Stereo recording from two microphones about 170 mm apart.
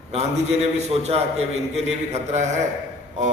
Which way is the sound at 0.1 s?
40° right (ahead or behind).